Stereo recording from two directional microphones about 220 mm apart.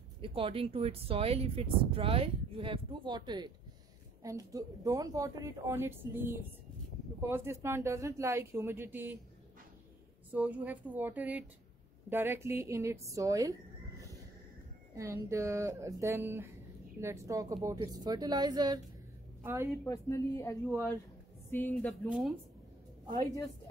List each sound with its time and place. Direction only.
0.2 s a woman's voice: 25° right (ahead or behind)
10.3 s a woman's voice: 5° right (ahead or behind)
15.0 s a woman's voice: 15° right (ahead or behind)
19.8 s speech: 15° left (ahead or behind)
22.0 s speech: centre (ahead or behind)